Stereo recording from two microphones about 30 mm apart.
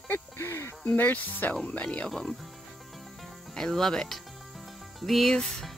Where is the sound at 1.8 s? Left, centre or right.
Left.